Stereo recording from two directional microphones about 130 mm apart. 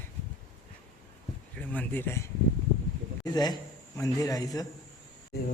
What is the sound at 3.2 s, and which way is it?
A man's voice, 30° left (ahead or behind).